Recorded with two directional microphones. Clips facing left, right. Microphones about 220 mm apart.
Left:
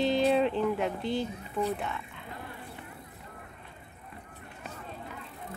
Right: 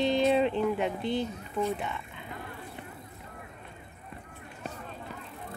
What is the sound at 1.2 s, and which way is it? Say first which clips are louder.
Speech: right 1 dB; 35° left (ahead or behind).